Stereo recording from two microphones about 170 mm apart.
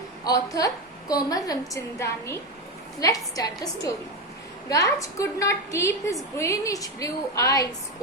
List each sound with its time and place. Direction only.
0.3 s a woman's voice: 20° left (ahead or behind)